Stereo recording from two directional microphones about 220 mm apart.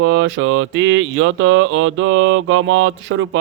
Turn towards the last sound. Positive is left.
turn(degrees=-60)  # may be behind; listen again after turning